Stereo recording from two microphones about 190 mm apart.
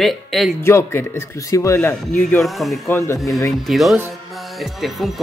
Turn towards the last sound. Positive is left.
turn(degrees=0)  # may be behind; listen again after turning